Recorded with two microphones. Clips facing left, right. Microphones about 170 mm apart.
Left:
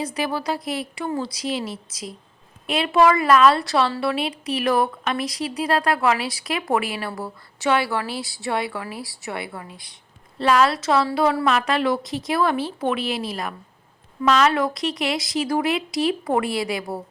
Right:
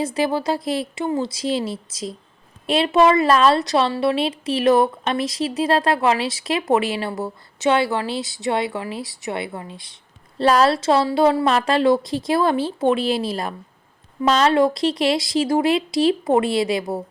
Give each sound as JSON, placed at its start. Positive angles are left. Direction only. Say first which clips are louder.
{"t": 0.0, "sound": "a woman's voice", "louder": "right 4 dB", "side_deg": -25}